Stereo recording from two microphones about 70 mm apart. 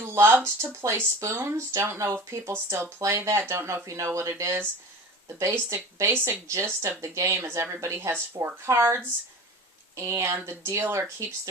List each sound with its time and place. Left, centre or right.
0.0 s speech: right